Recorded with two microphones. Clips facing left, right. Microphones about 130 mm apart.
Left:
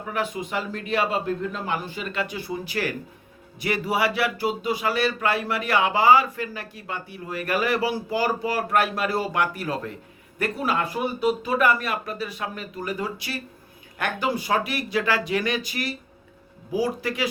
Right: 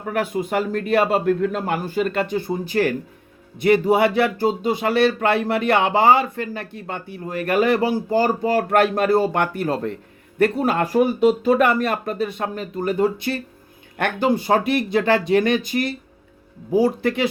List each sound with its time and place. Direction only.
0.0 s speech: 50° right (ahead or behind)